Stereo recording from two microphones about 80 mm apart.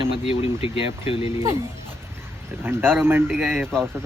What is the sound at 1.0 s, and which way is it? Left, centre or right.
Speech, right.